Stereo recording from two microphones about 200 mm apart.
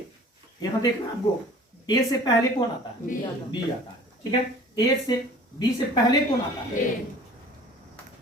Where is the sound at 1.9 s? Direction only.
20° left (ahead or behind).